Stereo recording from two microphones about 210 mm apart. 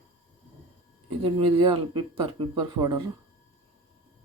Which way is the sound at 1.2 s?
25° right (ahead or behind).